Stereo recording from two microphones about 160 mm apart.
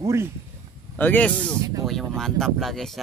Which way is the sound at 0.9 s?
10° left (ahead or behind).